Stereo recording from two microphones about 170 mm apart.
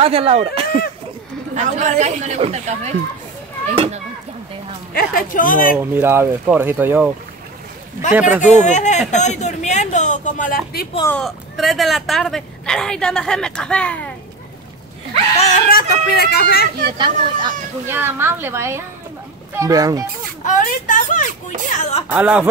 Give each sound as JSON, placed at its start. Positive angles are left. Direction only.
{"t": 0.0, "sound": "speech", "side_deg": -35}
{"t": 4.9, "sound": "speech", "side_deg": 55}
{"t": 5.8, "sound": "speech", "side_deg": -15}
{"t": 8.1, "sound": "speech", "side_deg": -10}
{"t": 8.6, "sound": "speech", "side_deg": 45}
{"t": 11.1, "sound": "speech", "side_deg": 5}
{"t": 15.3, "sound": "speech", "side_deg": 40}
{"t": 15.7, "sound": "speech", "side_deg": 65}
{"t": 17.8, "sound": "a child's voice", "side_deg": -15}
{"t": 20.4, "sound": "speech", "side_deg": 50}
{"t": 22.1, "sound": "speech", "side_deg": -10}